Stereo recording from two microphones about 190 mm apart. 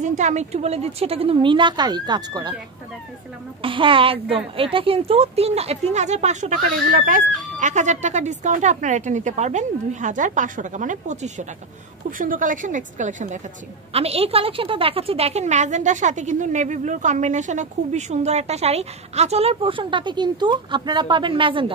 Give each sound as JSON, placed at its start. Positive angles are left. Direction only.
{"t": 0.0, "sound": "a woman's voice", "side_deg": -40}
{"t": 3.6, "sound": "a woman's voice", "side_deg": -25}